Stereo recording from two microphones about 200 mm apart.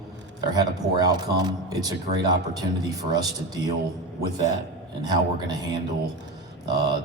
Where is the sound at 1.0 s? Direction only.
20° right (ahead or behind).